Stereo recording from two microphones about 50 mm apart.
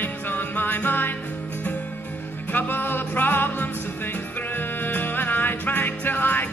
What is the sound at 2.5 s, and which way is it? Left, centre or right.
Music, left.